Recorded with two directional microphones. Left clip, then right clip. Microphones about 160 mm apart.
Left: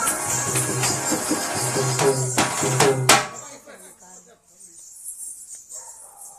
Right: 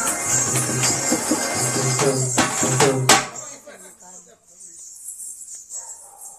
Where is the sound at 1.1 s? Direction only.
15° left (ahead or behind).